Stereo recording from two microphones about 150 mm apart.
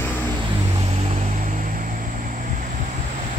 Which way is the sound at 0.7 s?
45° right (ahead or behind).